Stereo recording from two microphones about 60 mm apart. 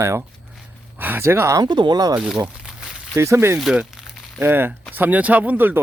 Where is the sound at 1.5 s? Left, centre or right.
Right.